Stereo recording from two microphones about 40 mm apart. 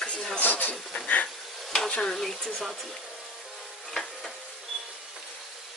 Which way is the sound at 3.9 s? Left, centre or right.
Centre.